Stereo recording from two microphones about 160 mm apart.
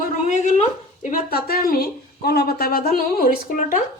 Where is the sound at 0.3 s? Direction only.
50° left (ahead or behind).